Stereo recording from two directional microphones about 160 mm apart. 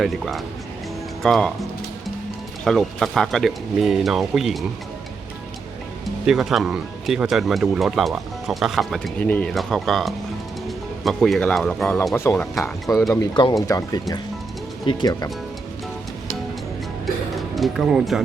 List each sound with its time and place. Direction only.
0.0 s speech: centre (ahead or behind)
2.6 s speech: centre (ahead or behind)
6.2 s speech: centre (ahead or behind); by 15.3 s 25° left (ahead or behind)
17.3 s speech: centre (ahead or behind)